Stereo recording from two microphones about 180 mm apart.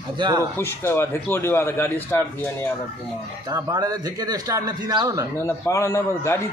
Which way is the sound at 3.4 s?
20° right (ahead or behind).